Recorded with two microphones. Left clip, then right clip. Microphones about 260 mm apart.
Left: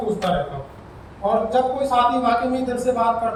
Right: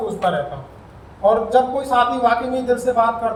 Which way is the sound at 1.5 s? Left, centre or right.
Centre.